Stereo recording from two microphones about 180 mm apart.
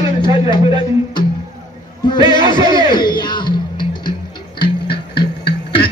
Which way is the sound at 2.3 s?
25° left (ahead or behind).